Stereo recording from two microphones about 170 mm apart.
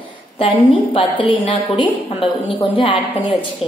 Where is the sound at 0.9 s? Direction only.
30° left (ahead or behind).